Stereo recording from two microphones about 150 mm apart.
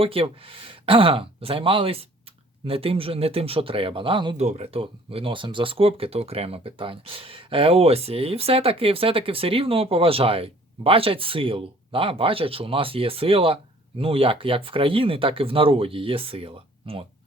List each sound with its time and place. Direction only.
0.0 s speech: 40° right (ahead or behind)
4.4 s speech: 50° right (ahead or behind)